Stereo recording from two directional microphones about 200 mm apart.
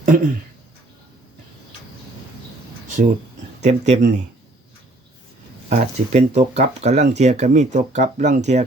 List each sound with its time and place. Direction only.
0.1 s speech: 40° right (ahead or behind)
3.6 s speech: 35° right (ahead or behind)
5.6 s speech: 35° right (ahead or behind)